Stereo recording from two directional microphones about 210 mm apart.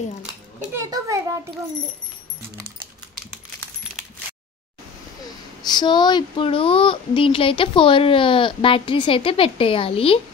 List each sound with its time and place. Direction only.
0.2 s a sound: 5° right (ahead or behind)
0.8 s a child's voice: 15° right (ahead or behind)
5.6 s speech: 20° left (ahead or behind)